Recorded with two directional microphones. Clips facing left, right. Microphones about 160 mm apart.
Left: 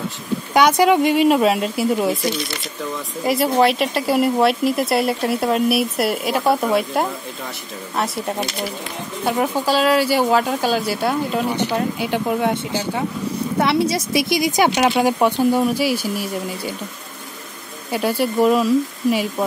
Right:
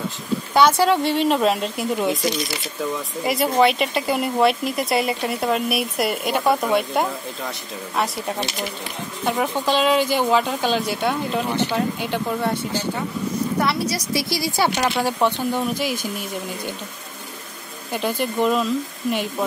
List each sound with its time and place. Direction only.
0.6 s speech: 15° left (ahead or behind)
13.6 s speech: 25° left (ahead or behind); by 16.7 s 5° left (ahead or behind)
17.9 s speech: 5° left (ahead or behind)